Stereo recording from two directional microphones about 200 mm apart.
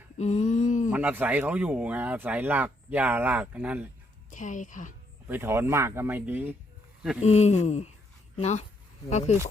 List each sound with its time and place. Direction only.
0.2 s a sound: 35° left (ahead or behind)
0.9 s speech: 10° right (ahead or behind)
4.3 s a woman's voice: 40° left (ahead or behind)
5.3 s speech: 10° right (ahead or behind)
7.2 s a woman's voice: 35° left (ahead or behind)